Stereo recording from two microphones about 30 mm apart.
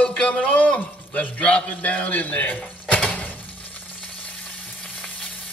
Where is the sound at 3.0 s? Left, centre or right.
Left.